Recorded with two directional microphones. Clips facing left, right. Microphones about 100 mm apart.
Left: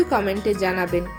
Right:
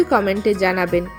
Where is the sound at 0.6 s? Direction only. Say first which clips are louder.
Right 4 dB; 70° right (ahead or behind).